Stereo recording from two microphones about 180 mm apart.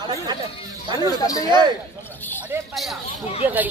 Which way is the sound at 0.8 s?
20° right (ahead or behind).